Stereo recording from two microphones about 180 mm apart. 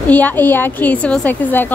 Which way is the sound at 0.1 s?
10° left (ahead or behind).